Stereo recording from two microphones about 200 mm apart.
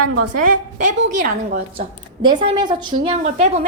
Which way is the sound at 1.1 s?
40° right (ahead or behind).